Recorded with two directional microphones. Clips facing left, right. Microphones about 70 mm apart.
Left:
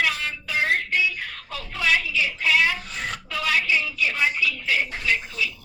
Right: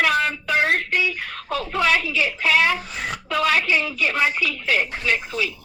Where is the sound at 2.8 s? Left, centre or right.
Centre.